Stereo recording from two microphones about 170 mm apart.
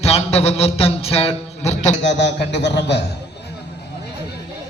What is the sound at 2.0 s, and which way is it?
A man's voice, 90° left.